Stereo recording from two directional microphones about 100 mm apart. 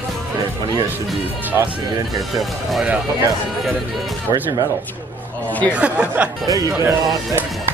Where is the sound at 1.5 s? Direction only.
30° right (ahead or behind).